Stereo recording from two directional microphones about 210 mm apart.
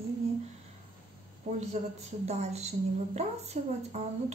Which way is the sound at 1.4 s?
35° right (ahead or behind).